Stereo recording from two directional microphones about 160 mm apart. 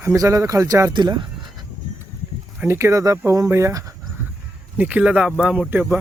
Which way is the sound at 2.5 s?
15° right (ahead or behind).